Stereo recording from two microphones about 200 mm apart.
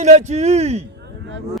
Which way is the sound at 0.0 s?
35° right (ahead or behind).